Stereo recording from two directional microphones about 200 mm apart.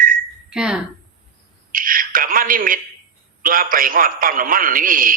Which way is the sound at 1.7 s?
45° right (ahead or behind).